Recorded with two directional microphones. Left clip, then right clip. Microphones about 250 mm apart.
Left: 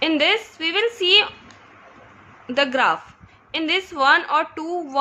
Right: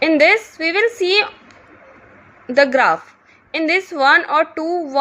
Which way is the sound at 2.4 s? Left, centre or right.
Centre.